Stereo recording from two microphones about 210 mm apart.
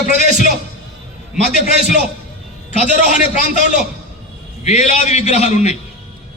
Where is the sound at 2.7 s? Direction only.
35° left (ahead or behind).